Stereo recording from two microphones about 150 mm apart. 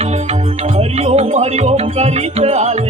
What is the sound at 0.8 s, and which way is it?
Music, 45° right (ahead or behind).